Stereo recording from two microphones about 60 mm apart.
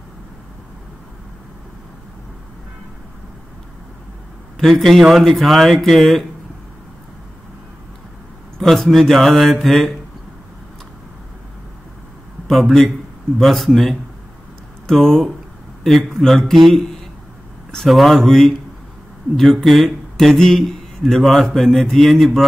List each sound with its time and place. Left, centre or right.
4.6 s speech: centre
8.5 s speech: centre
12.4 s speech: centre
17.8 s speech: centre